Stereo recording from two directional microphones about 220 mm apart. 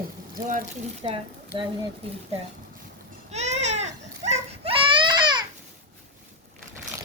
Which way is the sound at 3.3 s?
30° right (ahead or behind).